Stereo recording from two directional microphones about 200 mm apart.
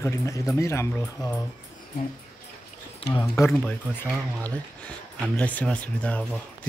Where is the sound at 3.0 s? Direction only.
15° left (ahead or behind).